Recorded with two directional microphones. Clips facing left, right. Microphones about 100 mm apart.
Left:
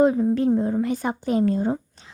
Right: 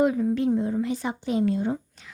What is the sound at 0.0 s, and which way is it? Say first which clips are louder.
A woman's voice: left 4 dB; 30° left (ahead or behind).